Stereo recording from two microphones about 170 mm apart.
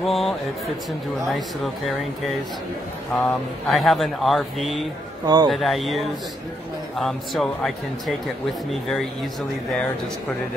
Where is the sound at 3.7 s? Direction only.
Centre (ahead or behind).